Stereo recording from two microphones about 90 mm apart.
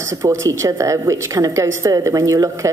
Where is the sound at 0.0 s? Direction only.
35° right (ahead or behind).